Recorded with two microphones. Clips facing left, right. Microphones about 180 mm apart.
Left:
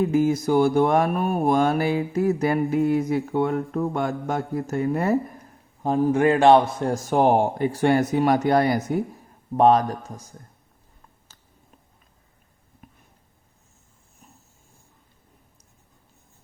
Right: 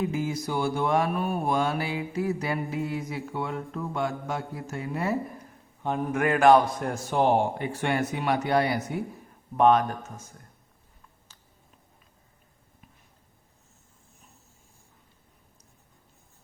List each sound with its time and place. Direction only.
0.0 s mantra: 45° left (ahead or behind)
5.8 s a man's voice: 35° left (ahead or behind)
6.9 s mantra: 45° left (ahead or behind)
9.6 s speech: 35° left (ahead or behind)